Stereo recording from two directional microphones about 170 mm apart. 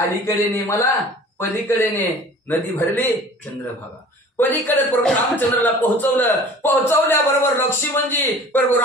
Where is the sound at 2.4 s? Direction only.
10° left (ahead or behind).